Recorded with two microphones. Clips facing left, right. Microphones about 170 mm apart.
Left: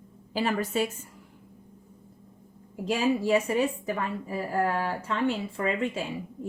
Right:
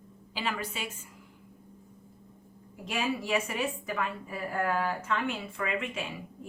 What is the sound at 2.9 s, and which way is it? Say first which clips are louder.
A woman's voice: left 6 dB; 35° left (ahead or behind).